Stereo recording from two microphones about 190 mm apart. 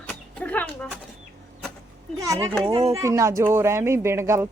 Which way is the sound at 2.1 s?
20° right (ahead or behind).